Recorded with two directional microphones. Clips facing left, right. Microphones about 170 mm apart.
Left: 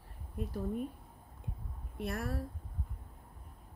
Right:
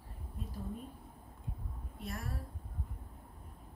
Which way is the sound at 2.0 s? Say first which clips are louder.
Left 6 dB; 65° left (ahead or behind).